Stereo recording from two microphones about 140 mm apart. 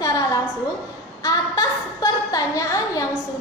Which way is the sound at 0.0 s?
25° left (ahead or behind).